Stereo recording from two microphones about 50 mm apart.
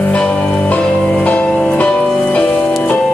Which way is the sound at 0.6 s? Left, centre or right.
Left.